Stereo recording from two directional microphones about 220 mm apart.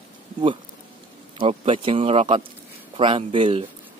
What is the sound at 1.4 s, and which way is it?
Speech, 25° right (ahead or behind).